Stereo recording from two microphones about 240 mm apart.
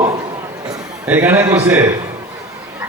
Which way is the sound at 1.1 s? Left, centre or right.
Centre.